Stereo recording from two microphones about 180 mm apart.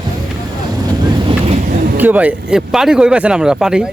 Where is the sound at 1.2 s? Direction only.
40° right (ahead or behind).